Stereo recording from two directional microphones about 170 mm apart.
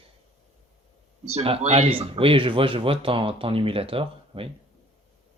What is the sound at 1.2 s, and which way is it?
Speech, 35° right (ahead or behind).